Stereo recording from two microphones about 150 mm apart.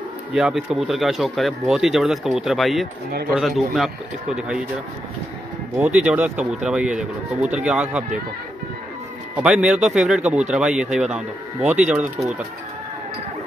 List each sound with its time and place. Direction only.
0.3 s speech: 5° right (ahead or behind)
5.8 s speech: 10° right (ahead or behind)
9.3 s speech: 5° right (ahead or behind)